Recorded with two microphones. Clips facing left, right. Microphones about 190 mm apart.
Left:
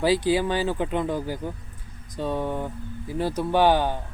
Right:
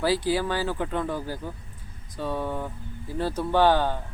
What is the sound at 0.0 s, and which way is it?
Speech, 15° left (ahead or behind).